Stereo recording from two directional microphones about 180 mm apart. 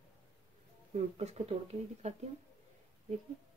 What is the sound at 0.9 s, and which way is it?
Speech, 35° right (ahead or behind).